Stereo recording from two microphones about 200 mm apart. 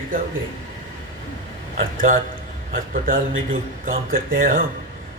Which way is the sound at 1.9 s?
45° right (ahead or behind).